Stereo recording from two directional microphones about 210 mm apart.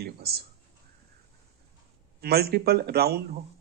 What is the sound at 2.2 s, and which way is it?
Speech, 50° right (ahead or behind).